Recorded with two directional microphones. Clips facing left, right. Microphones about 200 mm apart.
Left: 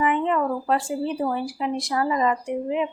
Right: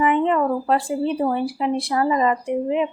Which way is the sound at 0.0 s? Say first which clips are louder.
Right 4 dB; 30° right (ahead or behind).